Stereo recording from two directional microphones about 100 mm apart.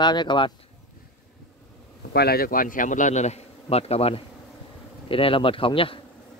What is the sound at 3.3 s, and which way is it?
Speech, 90° left.